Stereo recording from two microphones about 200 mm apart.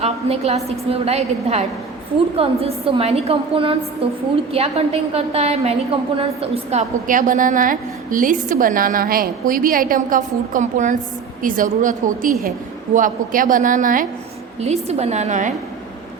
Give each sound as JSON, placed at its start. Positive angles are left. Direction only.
{"t": 0.0, "sound": "a woman's voice", "side_deg": -30}